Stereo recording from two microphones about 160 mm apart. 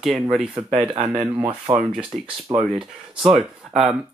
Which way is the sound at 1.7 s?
25° right (ahead or behind).